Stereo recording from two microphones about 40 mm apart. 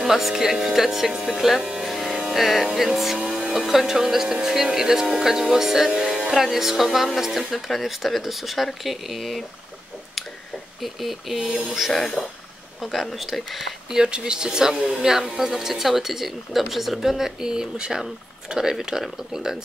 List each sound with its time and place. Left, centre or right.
0.0 s speech: centre
1.8 s music: centre
3.6 s speech: centre
10.8 s speech: centre
11.9 s speech: centre
12.8 s speech: centre
13.9 s speech: right